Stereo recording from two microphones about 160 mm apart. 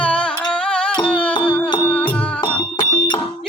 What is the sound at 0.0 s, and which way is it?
Music, 5° left (ahead or behind).